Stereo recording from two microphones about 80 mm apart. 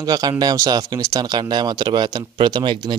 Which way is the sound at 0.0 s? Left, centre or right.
Right.